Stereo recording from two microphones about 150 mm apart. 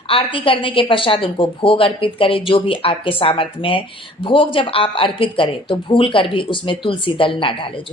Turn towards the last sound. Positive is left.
turn(degrees=35)  # may be behind; listen again after turning